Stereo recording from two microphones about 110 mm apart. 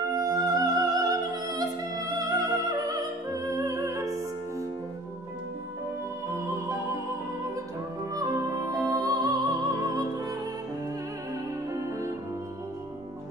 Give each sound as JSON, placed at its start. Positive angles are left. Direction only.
{"t": 0.1, "sound": "music", "side_deg": -35}
{"t": 6.2, "sound": "music", "side_deg": -25}
{"t": 8.1, "sound": "music", "side_deg": -35}